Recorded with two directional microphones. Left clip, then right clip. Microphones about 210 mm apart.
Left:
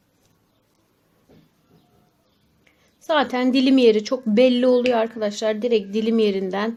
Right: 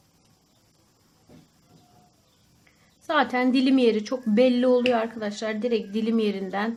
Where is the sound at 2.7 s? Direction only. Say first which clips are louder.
Left 5 dB; 30° left (ahead or behind).